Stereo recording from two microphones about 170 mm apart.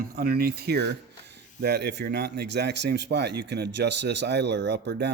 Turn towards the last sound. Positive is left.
turn(degrees=-85)